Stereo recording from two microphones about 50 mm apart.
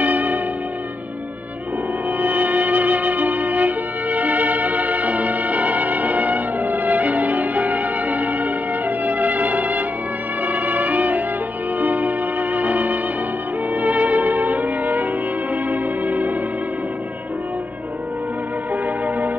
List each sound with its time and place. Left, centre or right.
0.0 s church bell: right
2.2 s music: right